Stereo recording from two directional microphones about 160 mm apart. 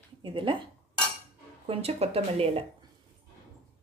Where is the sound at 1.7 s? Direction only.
40° right (ahead or behind).